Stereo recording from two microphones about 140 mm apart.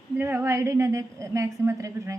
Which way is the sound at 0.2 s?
15° right (ahead or behind).